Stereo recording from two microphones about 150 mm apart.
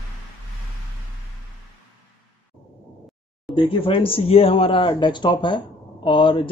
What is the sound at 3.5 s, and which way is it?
Speech, 35° left (ahead or behind).